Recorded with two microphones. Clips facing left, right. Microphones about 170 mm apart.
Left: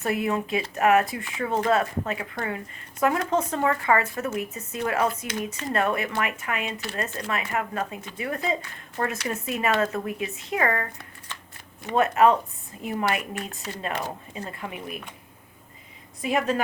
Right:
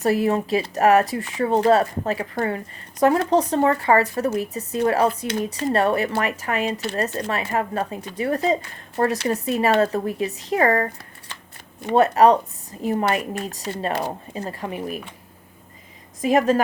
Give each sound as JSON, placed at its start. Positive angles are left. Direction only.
{"t": 0.0, "sound": "speech", "side_deg": -35}
{"t": 16.2, "sound": "speech", "side_deg": -40}